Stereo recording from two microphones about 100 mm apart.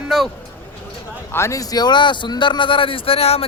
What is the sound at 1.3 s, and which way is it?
A man's voice, 30° left (ahead or behind).